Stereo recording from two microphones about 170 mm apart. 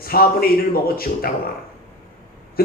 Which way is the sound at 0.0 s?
60° left (ahead or behind).